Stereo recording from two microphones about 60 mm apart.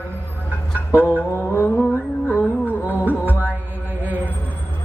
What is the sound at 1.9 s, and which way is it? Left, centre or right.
Mantra, left.